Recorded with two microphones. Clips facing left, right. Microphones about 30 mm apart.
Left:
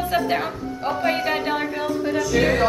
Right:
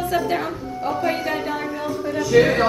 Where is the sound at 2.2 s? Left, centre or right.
Centre.